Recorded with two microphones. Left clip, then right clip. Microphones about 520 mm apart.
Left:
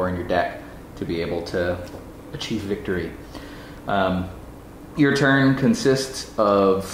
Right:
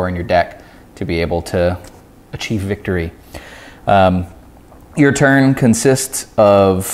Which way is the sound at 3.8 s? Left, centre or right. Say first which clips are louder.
Right 11 dB; right.